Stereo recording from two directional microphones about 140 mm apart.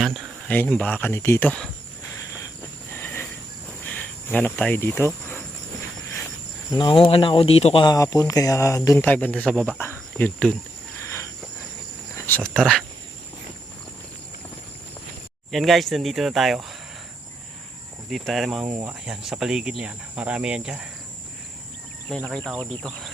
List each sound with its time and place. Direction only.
0.4 s speech: 10° left (ahead or behind)
2.9 s cricket: 15° left (ahead or behind)
3.8 s speech: 10° left (ahead or behind)
6.7 s speech: 35° left (ahead or behind)
7.9 s speech: 25° left (ahead or behind); by 9.7 s 5° left (ahead or behind)
9.7 s insect: 15° left (ahead or behind)
11.0 s cricket: 20° left (ahead or behind)
12.1 s speech: 15° left (ahead or behind)
15.5 s speech: centre (ahead or behind)
18.1 s speech: centre (ahead or behind)
18.6 s cricket: 15° right (ahead or behind)
19.0 s speech: 5° right (ahead or behind)
19.8 s cricket: 10° right (ahead or behind)
22.1 s speech: centre (ahead or behind)